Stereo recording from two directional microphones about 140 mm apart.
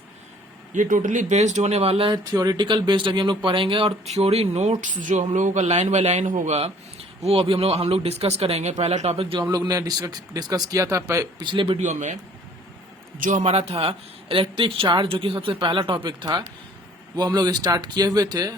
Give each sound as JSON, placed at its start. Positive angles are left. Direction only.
{"t": 0.7, "sound": "speech", "side_deg": -65}
{"t": 2.1, "sound": "speech", "side_deg": -25}
{"t": 7.3, "sound": "speech", "side_deg": -40}
{"t": 9.4, "sound": "speech", "side_deg": -30}
{"t": 11.8, "sound": "speech", "side_deg": -60}
{"t": 13.1, "sound": "a man's voice", "side_deg": -75}
{"t": 13.4, "sound": "speech", "side_deg": -50}